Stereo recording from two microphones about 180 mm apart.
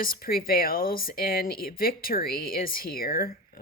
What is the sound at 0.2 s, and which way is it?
Speech, 55° left (ahead or behind).